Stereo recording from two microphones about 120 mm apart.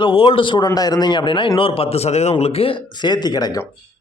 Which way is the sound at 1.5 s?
50° left (ahead or behind).